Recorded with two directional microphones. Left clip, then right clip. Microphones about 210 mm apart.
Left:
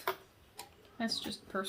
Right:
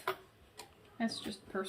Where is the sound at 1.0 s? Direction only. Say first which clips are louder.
Left 2 dB; 40° left (ahead or behind).